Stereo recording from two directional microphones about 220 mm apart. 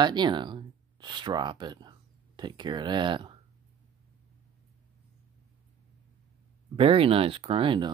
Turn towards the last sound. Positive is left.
turn(degrees=-25)  # may be behind; listen again after turning